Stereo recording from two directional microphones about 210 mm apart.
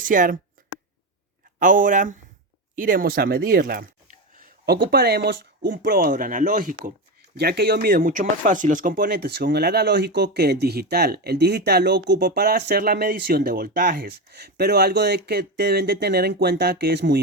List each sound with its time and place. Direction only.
0.0 s speech: 40° right (ahead or behind)
1.5 s speech: 40° right (ahead or behind)